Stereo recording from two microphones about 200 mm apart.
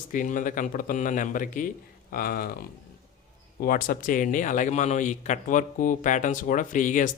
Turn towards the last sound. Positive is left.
turn(degrees=40)  # may be behind; listen again after turning